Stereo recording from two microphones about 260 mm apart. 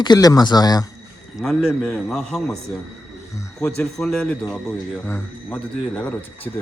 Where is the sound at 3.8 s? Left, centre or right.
Centre.